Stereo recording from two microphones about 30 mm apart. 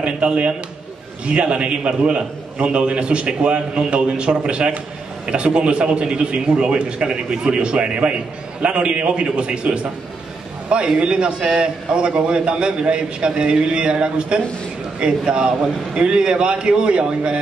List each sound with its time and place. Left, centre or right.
0.0 s a man's voice: right
11.0 s a man's voice: right